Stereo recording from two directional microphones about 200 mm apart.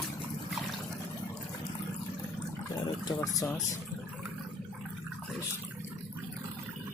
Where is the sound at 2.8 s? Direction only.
20° left (ahead or behind).